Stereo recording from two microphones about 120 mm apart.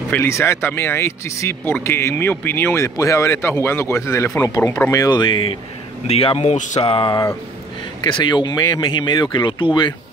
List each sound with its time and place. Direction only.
0.1 s speech: 20° left (ahead or behind); by 6.5 s 55° left (ahead or behind)
6.5 s a sound: 90° left
6.9 s speech: 45° left (ahead or behind)